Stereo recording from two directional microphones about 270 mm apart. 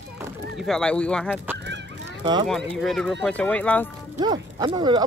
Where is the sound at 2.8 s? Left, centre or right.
Centre.